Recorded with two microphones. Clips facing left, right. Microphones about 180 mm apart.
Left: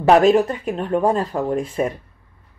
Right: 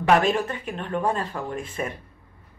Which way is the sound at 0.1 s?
40° left (ahead or behind).